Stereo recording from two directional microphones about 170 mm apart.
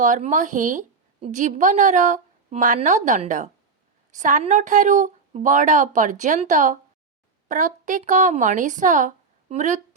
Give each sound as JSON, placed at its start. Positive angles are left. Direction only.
{"t": 0.0, "sound": "a woman's voice", "side_deg": -45}